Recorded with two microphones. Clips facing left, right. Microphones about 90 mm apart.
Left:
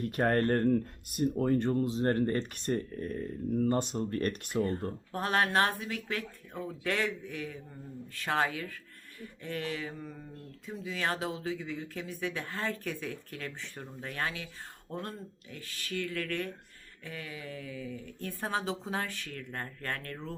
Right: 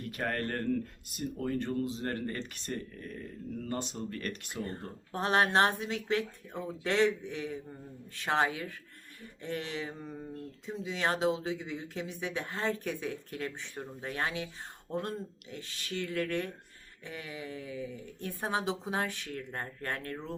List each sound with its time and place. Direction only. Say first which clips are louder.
0.0 s speech: left 7 dB; 40° left (ahead or behind)
5.1 s speech: right 2 dB; 25° right (ahead or behind)